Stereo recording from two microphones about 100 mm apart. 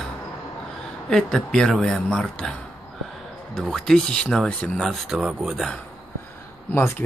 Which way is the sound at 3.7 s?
5° left (ahead or behind).